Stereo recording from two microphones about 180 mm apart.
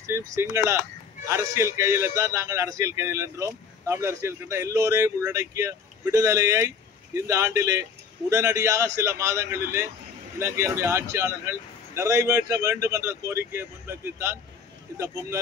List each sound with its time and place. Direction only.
0.0 s speech: 15° right (ahead or behind)